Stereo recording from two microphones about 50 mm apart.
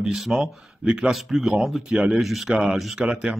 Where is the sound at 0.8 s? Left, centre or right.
Centre.